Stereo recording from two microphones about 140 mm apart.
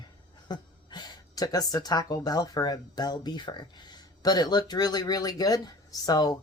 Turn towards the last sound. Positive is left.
turn(degrees=30)  # may be behind; listen again after turning